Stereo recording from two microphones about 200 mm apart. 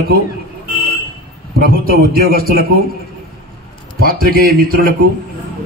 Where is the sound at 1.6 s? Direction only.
50° right (ahead or behind).